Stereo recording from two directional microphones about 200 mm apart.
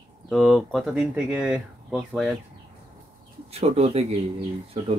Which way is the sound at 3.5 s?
30° right (ahead or behind).